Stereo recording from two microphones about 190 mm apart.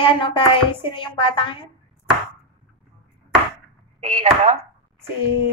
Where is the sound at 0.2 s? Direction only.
25° left (ahead or behind).